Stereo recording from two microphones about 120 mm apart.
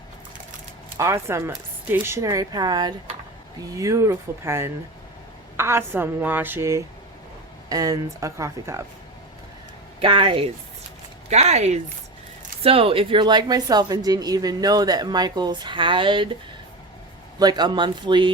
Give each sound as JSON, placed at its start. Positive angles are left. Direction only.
{"t": 0.9, "sound": "speech", "side_deg": -25}
{"t": 10.0, "sound": "speech", "side_deg": -45}
{"t": 11.3, "sound": "speech", "side_deg": -65}
{"t": 12.6, "sound": "a woman's voice", "side_deg": -50}
{"t": 17.4, "sound": "a woman's voice", "side_deg": -35}